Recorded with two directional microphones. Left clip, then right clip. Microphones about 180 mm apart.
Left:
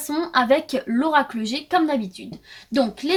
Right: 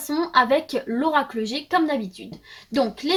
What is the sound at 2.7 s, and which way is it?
Speech, 10° left (ahead or behind).